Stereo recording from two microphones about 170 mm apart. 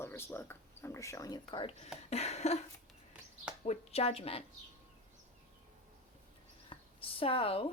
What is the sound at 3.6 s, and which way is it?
Speech, 40° left (ahead or behind).